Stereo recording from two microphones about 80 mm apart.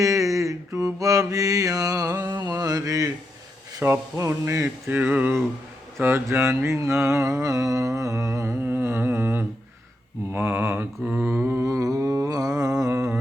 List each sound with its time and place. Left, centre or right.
0.0 s mantra: right
3.8 s humming: right
4.9 s mantra: right
6.0 s speech: right
7.4 s humming: right
10.3 s speech: right
11.0 s mantra: centre
11.7 s humming: right